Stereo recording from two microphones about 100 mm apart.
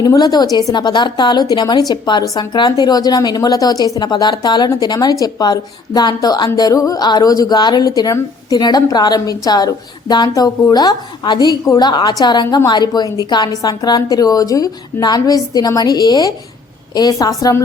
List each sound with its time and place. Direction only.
0.0 s a woman's voice: 40° left (ahead or behind)